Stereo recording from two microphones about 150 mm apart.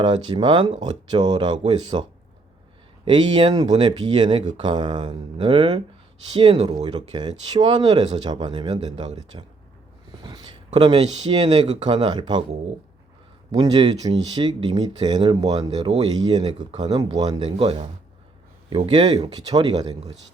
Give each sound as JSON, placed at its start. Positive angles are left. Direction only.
{"t": 0.0, "sound": "speech", "side_deg": -30}
{"t": 13.5, "sound": "speech", "side_deg": -25}